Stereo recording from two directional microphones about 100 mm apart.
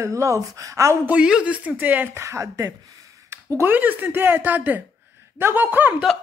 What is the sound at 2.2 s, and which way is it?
A woman's voice, 30° right (ahead or behind).